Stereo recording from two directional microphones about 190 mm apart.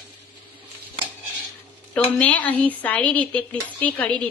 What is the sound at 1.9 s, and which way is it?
A woman's voice, 5° left (ahead or behind).